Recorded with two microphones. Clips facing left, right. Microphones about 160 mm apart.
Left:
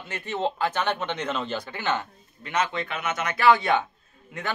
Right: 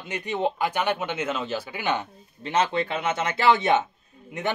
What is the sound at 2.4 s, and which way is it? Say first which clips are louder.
Speech: right 3 dB; 30° right (ahead or behind).